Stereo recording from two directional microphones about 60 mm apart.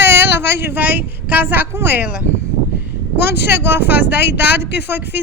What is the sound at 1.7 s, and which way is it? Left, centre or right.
Speech, right.